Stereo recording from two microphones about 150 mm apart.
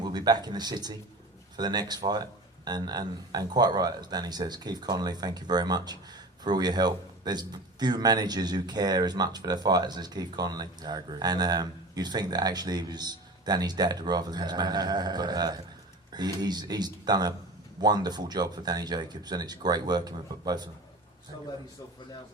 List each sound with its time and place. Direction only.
0.0 s speech: 25° right (ahead or behind)